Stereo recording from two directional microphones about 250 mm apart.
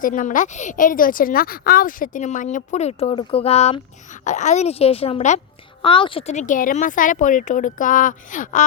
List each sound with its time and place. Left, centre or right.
0.0 s a woman's voice: left